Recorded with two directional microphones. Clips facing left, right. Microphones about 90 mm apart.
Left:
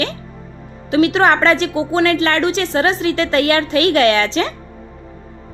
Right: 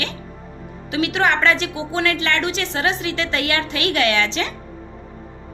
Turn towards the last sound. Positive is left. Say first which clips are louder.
# left 5 dB
turn(degrees=40)  # may be behind; listen again after turning